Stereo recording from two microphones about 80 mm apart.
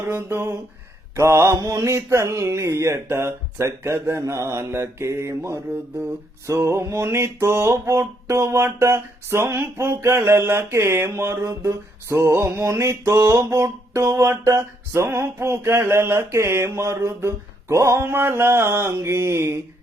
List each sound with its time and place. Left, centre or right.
0.1 s mantra: right